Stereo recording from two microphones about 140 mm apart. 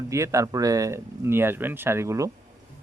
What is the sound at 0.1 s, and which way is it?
Speech, 20° right (ahead or behind).